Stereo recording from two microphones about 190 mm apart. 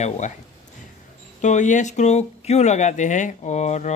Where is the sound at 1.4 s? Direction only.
40° left (ahead or behind).